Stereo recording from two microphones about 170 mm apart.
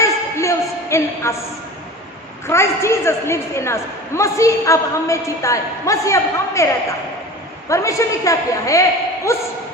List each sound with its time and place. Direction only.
0.0 s a sound: 15° left (ahead or behind)
2.5 s a man's voice: 15° left (ahead or behind)
7.7 s a woman's voice: 20° left (ahead or behind)